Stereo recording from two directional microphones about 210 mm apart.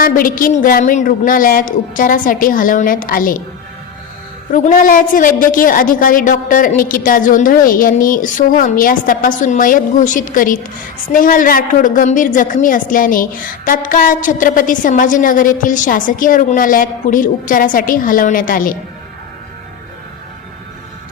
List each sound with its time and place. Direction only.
0.0 s a woman's voice: 40° left (ahead or behind)
4.5 s a woman's voice: 40° left (ahead or behind)